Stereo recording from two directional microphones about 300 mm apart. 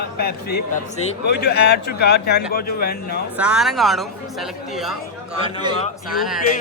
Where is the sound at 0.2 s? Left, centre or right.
Left.